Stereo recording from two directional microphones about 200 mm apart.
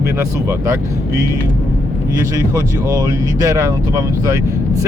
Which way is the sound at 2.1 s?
15° right (ahead or behind).